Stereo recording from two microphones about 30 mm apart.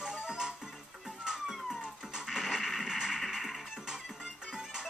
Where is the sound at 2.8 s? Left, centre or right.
Centre.